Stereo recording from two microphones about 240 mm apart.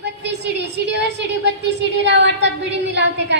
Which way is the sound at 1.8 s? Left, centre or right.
Right.